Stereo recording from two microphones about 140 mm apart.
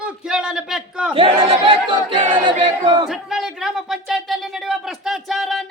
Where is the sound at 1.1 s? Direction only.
40° right (ahead or behind).